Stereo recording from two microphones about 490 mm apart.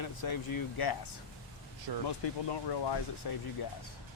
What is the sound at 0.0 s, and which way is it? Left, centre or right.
Speech, left.